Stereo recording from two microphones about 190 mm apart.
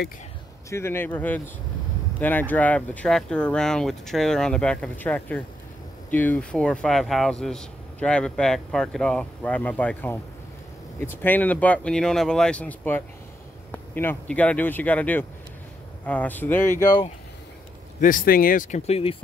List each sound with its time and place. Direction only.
0.7 s speech: 15° left (ahead or behind)
18.0 s speech: 45° left (ahead or behind); by 19.1 s 30° left (ahead or behind)